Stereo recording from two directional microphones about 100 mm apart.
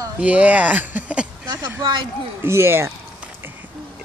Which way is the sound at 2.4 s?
25° right (ahead or behind).